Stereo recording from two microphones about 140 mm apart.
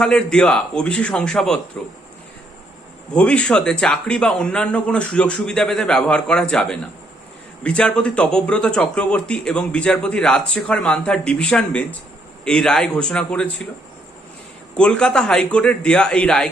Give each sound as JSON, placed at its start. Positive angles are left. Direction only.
{"t": 0.0, "sound": "speech", "side_deg": 5}
{"t": 3.2, "sound": "speech", "side_deg": 10}
{"t": 14.8, "sound": "speech", "side_deg": 5}